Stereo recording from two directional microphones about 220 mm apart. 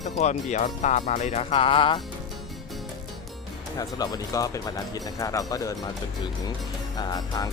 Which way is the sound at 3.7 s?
15° left (ahead or behind).